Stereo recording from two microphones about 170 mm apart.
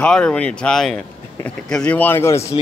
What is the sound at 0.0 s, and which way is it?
Speech, 5° left (ahead or behind).